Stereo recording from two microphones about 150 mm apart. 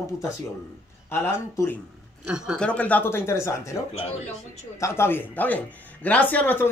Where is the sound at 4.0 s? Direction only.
45° left (ahead or behind).